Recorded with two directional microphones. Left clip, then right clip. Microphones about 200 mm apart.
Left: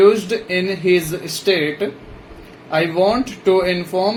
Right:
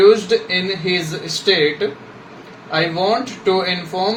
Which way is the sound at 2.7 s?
55° left (ahead or behind).